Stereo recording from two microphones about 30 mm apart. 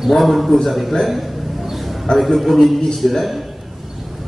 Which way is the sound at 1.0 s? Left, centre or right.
Centre.